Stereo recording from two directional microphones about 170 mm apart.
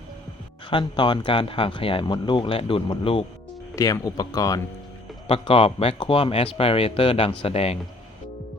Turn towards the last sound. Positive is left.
turn(degrees=35)  # may be behind; listen again after turning